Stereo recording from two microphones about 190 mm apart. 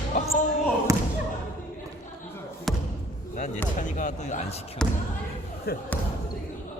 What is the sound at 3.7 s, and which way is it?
Speech, 40° left (ahead or behind).